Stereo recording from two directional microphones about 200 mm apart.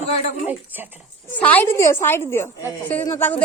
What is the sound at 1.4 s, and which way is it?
A woman's voice, 10° left (ahead or behind).